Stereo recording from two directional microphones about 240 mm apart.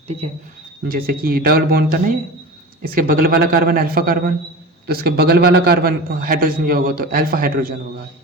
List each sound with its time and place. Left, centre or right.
0.9 s a man's voice: right